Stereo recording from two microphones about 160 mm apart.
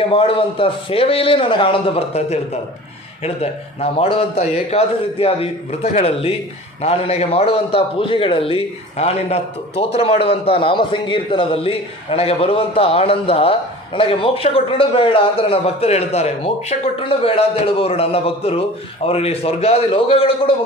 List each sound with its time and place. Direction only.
0.1 s a man's voice: 35° left (ahead or behind)
3.8 s a man's voice: 35° left (ahead or behind)